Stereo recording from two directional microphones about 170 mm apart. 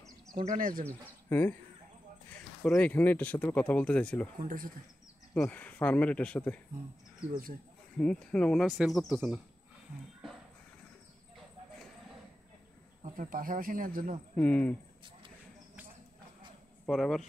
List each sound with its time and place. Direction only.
0.3 s speech: 50° right (ahead or behind)
0.8 s speech: 10° left (ahead or behind)
2.7 s speech: 10° left (ahead or behind)
4.4 s speech: 50° right (ahead or behind)
5.3 s speech: 10° left (ahead or behind)
8.0 s speech: 5° left (ahead or behind)
13.0 s speech: 55° right (ahead or behind)
14.3 s speech: 10° left (ahead or behind)
16.8 s speech: centre (ahead or behind)